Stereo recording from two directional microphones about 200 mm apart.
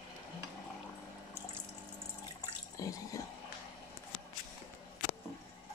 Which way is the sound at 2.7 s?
15° left (ahead or behind).